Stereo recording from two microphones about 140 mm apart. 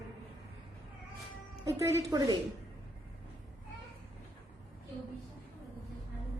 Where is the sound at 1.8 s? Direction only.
20° right (ahead or behind).